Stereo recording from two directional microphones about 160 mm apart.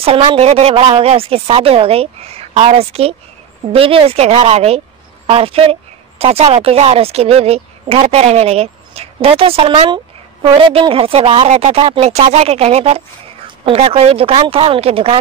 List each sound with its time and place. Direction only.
0.0 s a woman's voice: 35° right (ahead or behind)
9.8 s speech: 30° right (ahead or behind)